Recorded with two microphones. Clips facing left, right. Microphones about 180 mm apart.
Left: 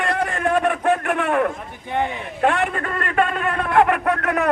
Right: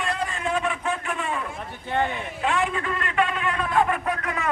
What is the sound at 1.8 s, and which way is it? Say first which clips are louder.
Speech: left 2 dB; 15° left (ahead or behind).